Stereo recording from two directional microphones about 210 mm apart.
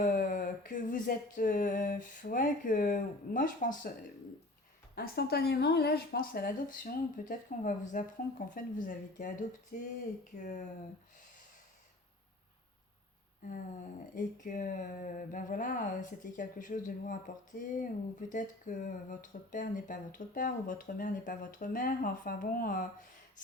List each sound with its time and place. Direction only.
0.0 s a sound: 40° left (ahead or behind)
4.9 s speech: 45° left (ahead or behind)
9.7 s speech: 50° left (ahead or behind)
10.3 s speech: 35° left (ahead or behind)
13.4 s speech: 35° left (ahead or behind)